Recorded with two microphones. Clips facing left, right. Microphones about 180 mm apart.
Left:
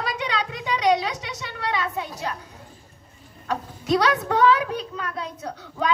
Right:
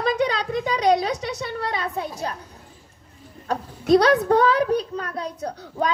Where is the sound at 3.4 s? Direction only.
40° right (ahead or behind).